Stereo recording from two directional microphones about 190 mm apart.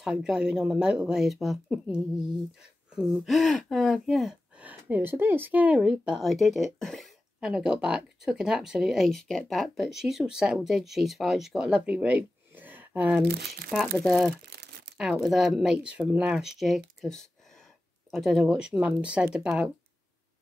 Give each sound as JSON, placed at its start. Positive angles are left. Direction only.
{"t": 0.0, "sound": "speech", "side_deg": -5}
{"t": 13.2, "sound": "speech", "side_deg": -60}
{"t": 13.7, "sound": "speech", "side_deg": 0}
{"t": 14.3, "sound": "crumpling", "side_deg": -55}
{"t": 15.0, "sound": "speech", "side_deg": 0}